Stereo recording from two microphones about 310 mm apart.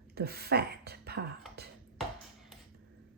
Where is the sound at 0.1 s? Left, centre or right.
Right.